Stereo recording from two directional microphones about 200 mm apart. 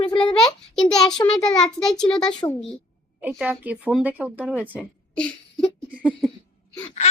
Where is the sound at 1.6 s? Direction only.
Centre (ahead or behind).